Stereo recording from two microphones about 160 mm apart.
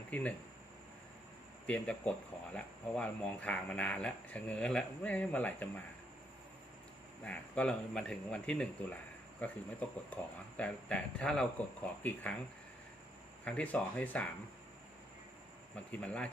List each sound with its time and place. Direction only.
0.1 s speech: 10° left (ahead or behind)
1.6 s speech: 5° left (ahead or behind)
7.3 s speech: 5° left (ahead or behind)
13.4 s speech: 10° left (ahead or behind)
15.9 s speech: 5° left (ahead or behind)